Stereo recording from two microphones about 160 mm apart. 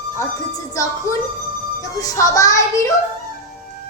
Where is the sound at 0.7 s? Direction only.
20° left (ahead or behind).